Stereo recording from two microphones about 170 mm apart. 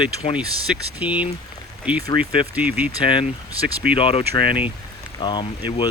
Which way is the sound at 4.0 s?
35° left (ahead or behind).